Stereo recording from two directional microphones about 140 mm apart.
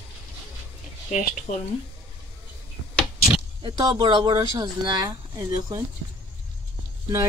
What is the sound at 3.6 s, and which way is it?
Speech, 30° right (ahead or behind).